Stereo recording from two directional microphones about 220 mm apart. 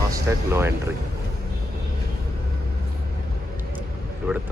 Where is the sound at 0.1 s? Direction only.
10° right (ahead or behind).